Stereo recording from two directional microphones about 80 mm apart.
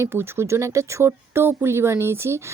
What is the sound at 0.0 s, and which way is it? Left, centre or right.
Speech, right.